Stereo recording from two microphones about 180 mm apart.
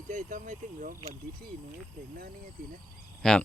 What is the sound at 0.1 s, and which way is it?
Speech, 45° right (ahead or behind).